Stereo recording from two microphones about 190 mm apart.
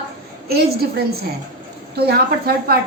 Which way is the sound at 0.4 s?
55° right (ahead or behind).